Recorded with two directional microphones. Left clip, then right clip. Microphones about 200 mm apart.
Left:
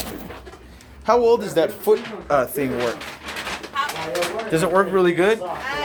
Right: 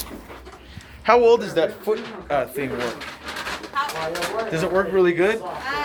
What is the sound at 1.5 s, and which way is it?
Speech, 25° left (ahead or behind).